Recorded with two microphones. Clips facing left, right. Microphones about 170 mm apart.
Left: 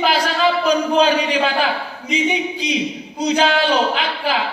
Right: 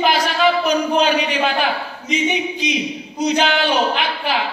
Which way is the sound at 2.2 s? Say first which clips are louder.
Right 1 dB; 30° left (ahead or behind).